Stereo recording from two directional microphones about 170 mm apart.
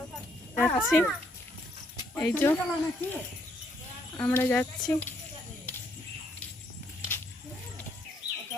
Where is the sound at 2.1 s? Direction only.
10° left (ahead or behind).